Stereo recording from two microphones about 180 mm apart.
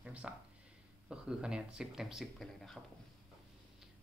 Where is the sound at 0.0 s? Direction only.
5° right (ahead or behind).